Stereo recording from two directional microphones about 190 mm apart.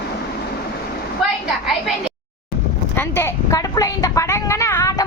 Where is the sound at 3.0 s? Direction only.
10° left (ahead or behind).